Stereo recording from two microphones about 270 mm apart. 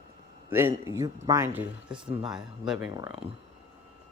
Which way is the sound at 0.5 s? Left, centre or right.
Centre.